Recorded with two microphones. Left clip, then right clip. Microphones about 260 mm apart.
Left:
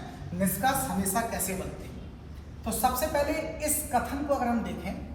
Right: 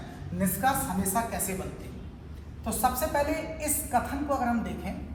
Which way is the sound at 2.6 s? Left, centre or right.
Right.